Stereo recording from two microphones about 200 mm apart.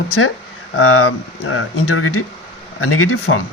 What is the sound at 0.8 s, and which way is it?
Speech, 90° left.